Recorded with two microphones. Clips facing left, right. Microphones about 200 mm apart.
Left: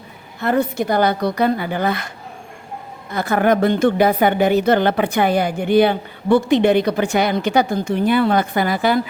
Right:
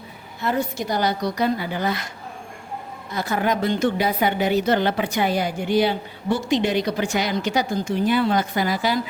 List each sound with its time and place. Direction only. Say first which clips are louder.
0.3 s a woman's voice: left 6 dB; 60° left (ahead or behind)
3.1 s a woman's voice: left 6 dB; 55° left (ahead or behind)